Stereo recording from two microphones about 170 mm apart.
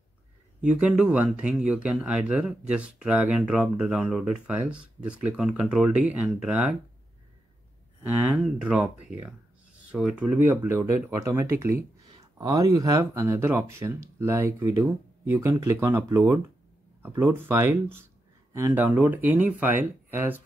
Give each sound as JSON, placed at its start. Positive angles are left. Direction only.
{"t": 0.6, "sound": "speech", "side_deg": -5}
{"t": 8.0, "sound": "speech", "side_deg": -10}